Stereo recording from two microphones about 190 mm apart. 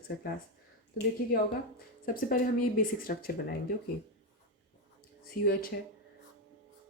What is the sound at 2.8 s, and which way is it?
Speech, 50° left (ahead or behind).